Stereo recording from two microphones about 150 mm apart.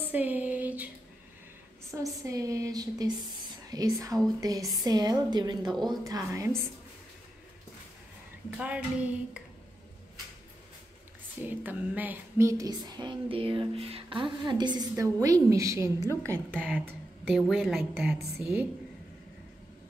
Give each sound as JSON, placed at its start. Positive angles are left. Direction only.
{"t": 0.0, "sound": "a sound", "side_deg": -10}
{"t": 2.0, "sound": "a woman's voice", "side_deg": -20}
{"t": 8.5, "sound": "speech", "side_deg": -10}
{"t": 11.4, "sound": "a woman's voice", "side_deg": -10}
{"t": 16.5, "sound": "a woman's voice", "side_deg": 5}